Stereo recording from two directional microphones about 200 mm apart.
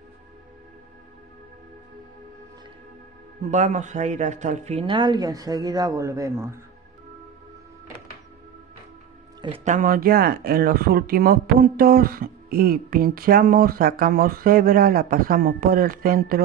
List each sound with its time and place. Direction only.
3.4 s a woman's voice: 35° right (ahead or behind); by 6.6 s 15° right (ahead or behind)
9.7 s speech: 45° right (ahead or behind)